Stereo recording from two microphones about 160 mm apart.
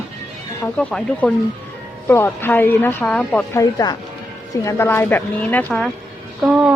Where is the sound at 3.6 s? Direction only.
25° left (ahead or behind); by 5.9 s 10° left (ahead or behind).